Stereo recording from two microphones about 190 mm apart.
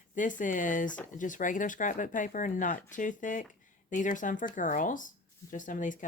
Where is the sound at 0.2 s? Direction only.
45° left (ahead or behind).